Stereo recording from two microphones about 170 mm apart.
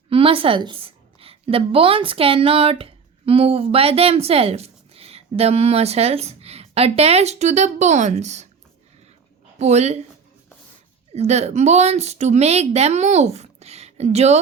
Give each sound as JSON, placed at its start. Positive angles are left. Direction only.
{"t": 0.1, "sound": "a woman's voice", "side_deg": -35}
{"t": 9.6, "sound": "a woman's voice", "side_deg": -40}
{"t": 11.1, "sound": "a woman's voice", "side_deg": -40}